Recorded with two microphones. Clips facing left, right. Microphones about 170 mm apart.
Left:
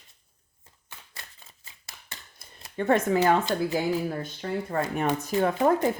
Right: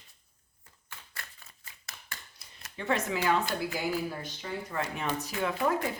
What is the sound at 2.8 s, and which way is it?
Speech, 50° left (ahead or behind).